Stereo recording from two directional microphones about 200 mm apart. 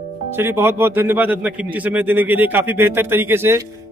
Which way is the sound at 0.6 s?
10° right (ahead or behind).